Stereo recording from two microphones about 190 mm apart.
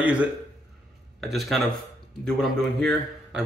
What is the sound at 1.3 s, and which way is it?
A man's voice, centre (ahead or behind).